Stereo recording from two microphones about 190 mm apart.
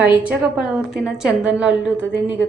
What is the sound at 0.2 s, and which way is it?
A woman's voice, 5° right (ahead or behind).